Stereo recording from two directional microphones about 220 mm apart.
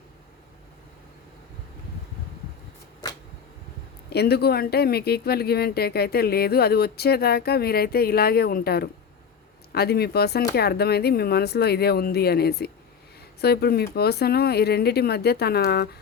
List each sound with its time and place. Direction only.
4.1 s speech: 45° left (ahead or behind)